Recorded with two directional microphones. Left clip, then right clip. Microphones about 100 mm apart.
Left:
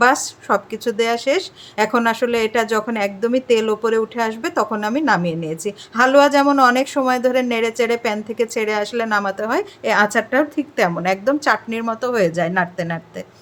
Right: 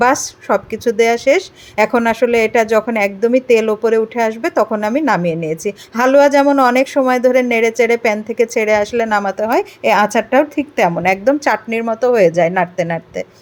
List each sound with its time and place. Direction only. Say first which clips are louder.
0.0 s a woman's voice: right 2 dB; 25° right (ahead or behind)
11.8 s a woman's voice: right 7 dB; 20° right (ahead or behind)